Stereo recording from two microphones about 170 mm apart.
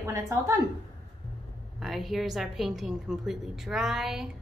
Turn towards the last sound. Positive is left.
turn(degrees=0)  # may be behind; listen again after turning